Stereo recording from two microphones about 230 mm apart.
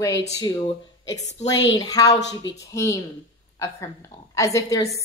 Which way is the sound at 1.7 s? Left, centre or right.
Centre.